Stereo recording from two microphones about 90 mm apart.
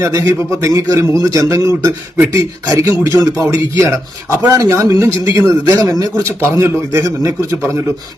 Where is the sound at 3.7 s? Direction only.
30° right (ahead or behind).